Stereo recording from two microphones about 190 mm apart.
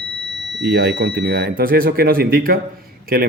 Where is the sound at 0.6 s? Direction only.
55° right (ahead or behind).